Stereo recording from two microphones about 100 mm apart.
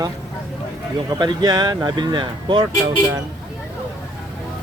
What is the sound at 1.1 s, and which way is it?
Speech, 45° right (ahead or behind).